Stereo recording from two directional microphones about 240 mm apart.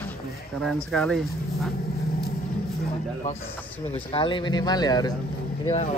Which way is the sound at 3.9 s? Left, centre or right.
Left.